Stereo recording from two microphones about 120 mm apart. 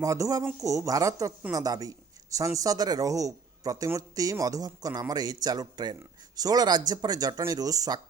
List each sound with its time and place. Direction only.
0.0 s a man's voice: 25° right (ahead or behind)